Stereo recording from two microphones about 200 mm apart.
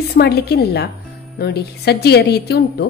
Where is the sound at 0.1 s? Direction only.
50° left (ahead or behind).